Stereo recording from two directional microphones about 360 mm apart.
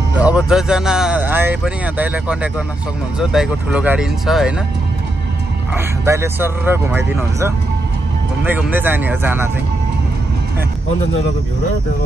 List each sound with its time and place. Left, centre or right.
0.2 s speech: centre
6.0 s speech: centre